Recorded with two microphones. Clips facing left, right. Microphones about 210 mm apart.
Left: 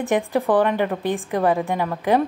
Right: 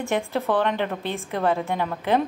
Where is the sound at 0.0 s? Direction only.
15° left (ahead or behind).